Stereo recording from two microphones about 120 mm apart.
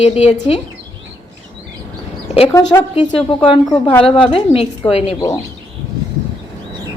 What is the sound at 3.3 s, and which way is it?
Speech, 45° left (ahead or behind).